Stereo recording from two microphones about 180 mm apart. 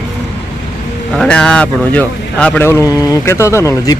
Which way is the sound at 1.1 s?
5° left (ahead or behind).